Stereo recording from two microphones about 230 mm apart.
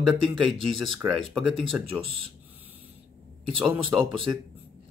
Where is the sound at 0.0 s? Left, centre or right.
Centre.